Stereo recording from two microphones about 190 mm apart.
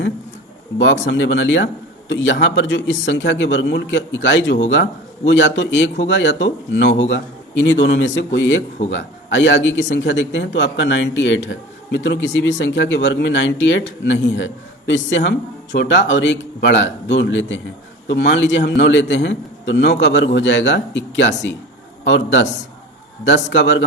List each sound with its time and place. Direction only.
0.8 s a man's voice: 70° left (ahead or behind)